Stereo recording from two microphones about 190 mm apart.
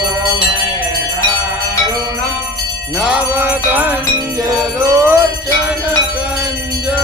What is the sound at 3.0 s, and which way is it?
Jingle bell, 10° right (ahead or behind).